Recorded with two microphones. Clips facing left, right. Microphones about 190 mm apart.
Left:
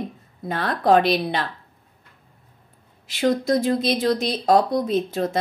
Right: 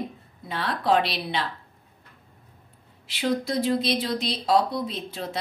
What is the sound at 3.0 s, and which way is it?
Speech, 45° left (ahead or behind).